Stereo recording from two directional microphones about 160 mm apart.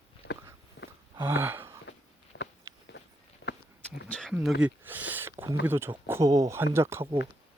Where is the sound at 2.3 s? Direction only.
90° left.